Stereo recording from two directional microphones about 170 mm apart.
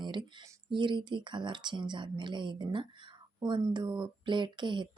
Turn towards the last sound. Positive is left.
turn(degrees=-25)  # may be behind; listen again after turning